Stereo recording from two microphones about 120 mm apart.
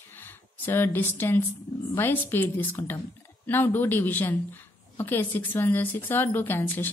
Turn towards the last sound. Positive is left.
turn(degrees=15)  # may be behind; listen again after turning